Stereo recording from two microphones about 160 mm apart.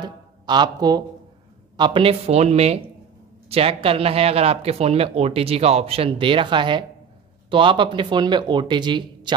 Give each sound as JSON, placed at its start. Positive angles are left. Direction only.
{"t": 0.0, "sound": "speech", "side_deg": -25}